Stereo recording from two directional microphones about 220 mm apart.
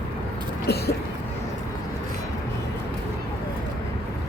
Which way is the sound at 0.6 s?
45° left (ahead or behind).